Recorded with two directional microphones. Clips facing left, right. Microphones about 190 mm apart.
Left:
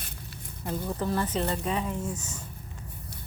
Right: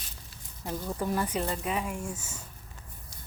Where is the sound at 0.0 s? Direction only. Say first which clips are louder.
Left 7 dB; 60° left (ahead or behind).